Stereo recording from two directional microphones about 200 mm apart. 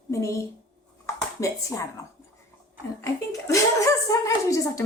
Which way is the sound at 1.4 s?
15° left (ahead or behind).